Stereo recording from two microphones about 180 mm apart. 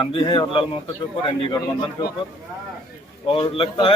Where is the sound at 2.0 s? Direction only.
20° left (ahead or behind).